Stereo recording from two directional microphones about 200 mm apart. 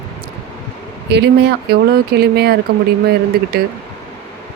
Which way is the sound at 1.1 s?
55° right (ahead or behind).